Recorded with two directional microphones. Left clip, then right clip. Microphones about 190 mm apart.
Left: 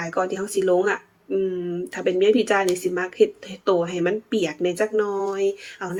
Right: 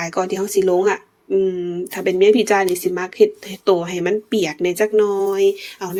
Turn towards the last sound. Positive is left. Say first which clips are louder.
# right 7 dB
turn(degrees=-35)  # may be behind; listen again after turning